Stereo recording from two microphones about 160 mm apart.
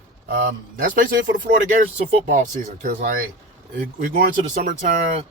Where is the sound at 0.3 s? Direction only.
65° right (ahead or behind).